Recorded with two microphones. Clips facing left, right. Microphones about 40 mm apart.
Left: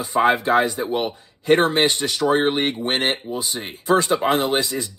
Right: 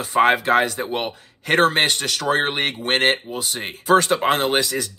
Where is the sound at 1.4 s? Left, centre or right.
Right.